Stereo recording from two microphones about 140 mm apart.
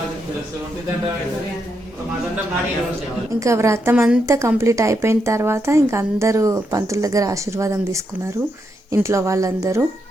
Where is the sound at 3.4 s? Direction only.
20° right (ahead or behind).